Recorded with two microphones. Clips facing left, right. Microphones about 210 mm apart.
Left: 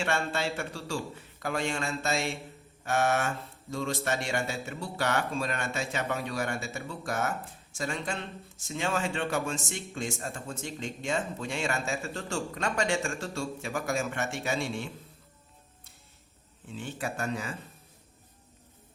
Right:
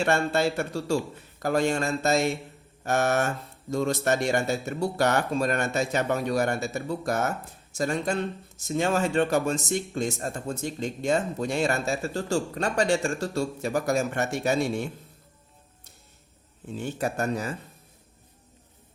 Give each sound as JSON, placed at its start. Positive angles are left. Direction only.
{"t": 0.0, "sound": "speech", "side_deg": -40}
{"t": 16.6, "sound": "speech", "side_deg": -40}